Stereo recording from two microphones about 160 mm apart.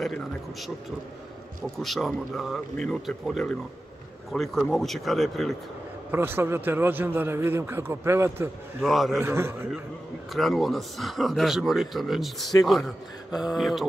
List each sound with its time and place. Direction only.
0.0 s speech: centre (ahead or behind)
1.8 s speech: centre (ahead or behind)
6.1 s a man's voice: 15° right (ahead or behind)
8.8 s speech: centre (ahead or behind)
9.2 s a man's voice: 15° right (ahead or behind)
10.3 s speech: centre (ahead or behind)